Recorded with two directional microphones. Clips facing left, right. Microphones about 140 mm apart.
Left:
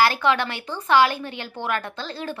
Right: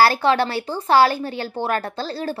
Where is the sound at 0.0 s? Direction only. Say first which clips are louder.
Right 4 dB; 35° right (ahead or behind).